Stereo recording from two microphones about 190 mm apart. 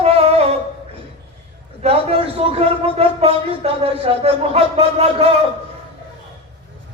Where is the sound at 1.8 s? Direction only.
30° right (ahead or behind).